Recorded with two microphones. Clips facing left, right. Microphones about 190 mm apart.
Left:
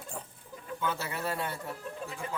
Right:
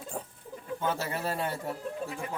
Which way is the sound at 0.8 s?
45° right (ahead or behind).